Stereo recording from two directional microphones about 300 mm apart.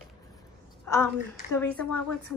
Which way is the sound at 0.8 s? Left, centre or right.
Centre.